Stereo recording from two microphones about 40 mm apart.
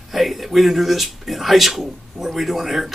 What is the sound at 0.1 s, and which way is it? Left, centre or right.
Speech, centre.